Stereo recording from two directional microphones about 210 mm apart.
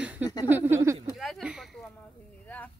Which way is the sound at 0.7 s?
15° right (ahead or behind).